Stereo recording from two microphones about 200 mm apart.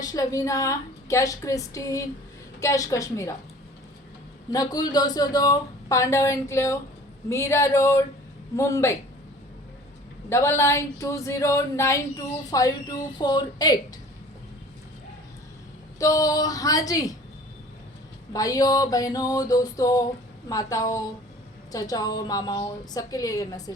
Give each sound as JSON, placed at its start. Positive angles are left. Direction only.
{"t": 0.0, "sound": "speech", "side_deg": 15}
{"t": 4.5, "sound": "speech", "side_deg": 20}
{"t": 10.2, "sound": "speech", "side_deg": 10}
{"t": 16.0, "sound": "speech", "side_deg": 15}
{"t": 18.3, "sound": "speech", "side_deg": 20}